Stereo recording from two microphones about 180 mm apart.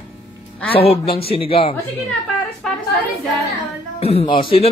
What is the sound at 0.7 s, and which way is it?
A man's voice, 35° left (ahead or behind).